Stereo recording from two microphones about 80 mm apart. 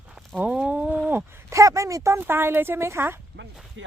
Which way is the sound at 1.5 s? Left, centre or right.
Right.